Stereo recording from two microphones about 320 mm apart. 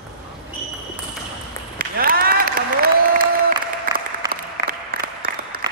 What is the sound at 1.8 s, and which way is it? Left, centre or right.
Applause, right.